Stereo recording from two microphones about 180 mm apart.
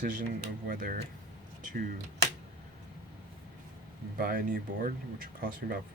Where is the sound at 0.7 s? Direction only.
50° right (ahead or behind).